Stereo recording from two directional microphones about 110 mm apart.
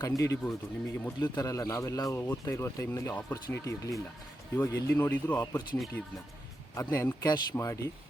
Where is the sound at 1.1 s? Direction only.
40° left (ahead or behind).